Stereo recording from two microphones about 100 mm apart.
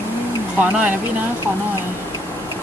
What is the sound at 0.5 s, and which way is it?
Speech, 15° right (ahead or behind).